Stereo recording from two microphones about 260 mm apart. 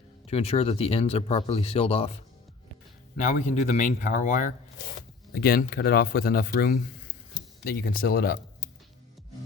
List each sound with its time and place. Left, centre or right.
0.3 s speech: left